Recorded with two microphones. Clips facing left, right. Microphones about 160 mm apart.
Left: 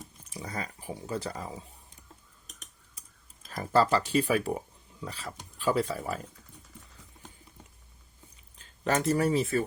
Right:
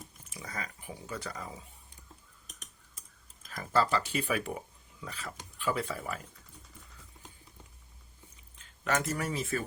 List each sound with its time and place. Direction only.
0.3 s speech: 35° left (ahead or behind)
3.4 s speech: 35° left (ahead or behind)
8.5 s speech: 35° left (ahead or behind)